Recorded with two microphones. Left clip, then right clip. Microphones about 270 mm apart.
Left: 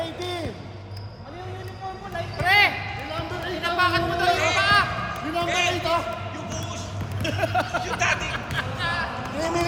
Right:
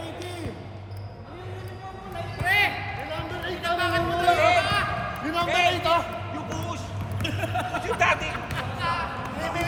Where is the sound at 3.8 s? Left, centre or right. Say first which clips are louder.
Left 5 dB; left.